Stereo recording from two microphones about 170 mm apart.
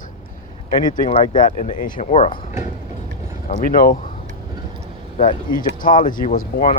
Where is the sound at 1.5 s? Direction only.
50° left (ahead or behind).